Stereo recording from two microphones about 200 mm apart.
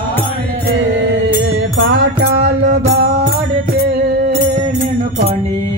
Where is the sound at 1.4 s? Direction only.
60° right (ahead or behind).